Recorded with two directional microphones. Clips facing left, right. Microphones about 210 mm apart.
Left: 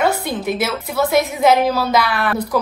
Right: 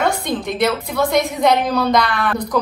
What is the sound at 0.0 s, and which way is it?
A woman's voice, 5° left (ahead or behind).